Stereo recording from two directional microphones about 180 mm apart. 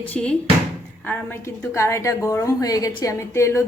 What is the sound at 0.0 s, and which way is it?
A woman's voice, 5° left (ahead or behind).